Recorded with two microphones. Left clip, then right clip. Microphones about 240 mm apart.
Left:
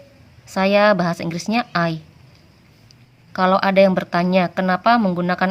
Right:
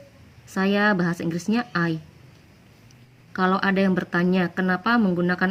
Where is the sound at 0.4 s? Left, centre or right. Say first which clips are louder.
Left 7 dB; left.